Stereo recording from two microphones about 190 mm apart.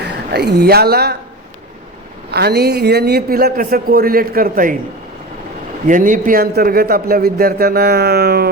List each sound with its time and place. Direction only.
0.3 s speech: 60° right (ahead or behind)
2.3 s a man's voice: 55° right (ahead or behind)
5.9 s a man's voice: 45° right (ahead or behind)